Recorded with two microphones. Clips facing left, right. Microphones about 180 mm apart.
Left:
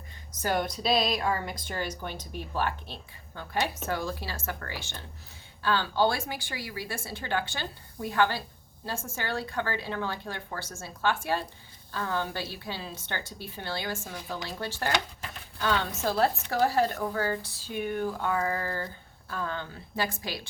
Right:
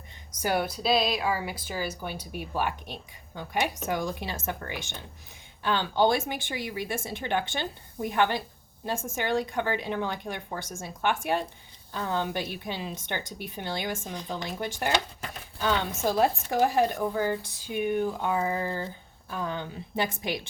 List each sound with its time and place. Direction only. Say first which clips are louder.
0.4 s speech: right 1 dB; 10° right (ahead or behind)